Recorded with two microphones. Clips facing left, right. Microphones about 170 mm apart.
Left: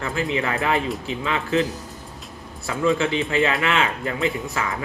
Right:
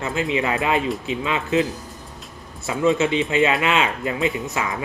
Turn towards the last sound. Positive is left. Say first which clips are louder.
# right 1 dB
turn(degrees=-20)  # may be behind; listen again after turning